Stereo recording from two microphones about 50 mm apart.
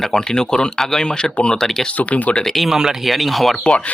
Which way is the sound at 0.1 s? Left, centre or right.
Centre.